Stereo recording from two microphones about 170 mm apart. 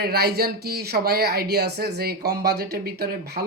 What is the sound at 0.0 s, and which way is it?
Speech, 70° right (ahead or behind).